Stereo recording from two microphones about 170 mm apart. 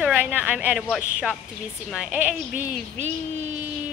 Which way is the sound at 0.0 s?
10° right (ahead or behind).